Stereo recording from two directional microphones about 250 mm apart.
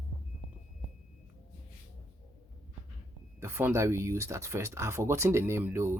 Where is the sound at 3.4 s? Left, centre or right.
Centre.